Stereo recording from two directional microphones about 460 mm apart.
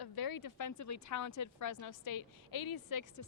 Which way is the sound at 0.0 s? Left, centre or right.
Left.